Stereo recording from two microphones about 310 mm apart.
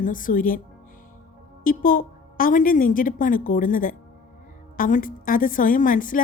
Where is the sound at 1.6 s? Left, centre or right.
Left.